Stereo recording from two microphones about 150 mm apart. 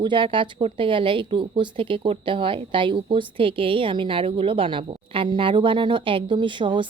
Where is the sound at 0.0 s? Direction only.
35° right (ahead or behind).